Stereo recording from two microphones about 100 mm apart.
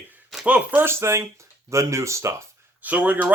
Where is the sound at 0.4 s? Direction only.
15° right (ahead or behind).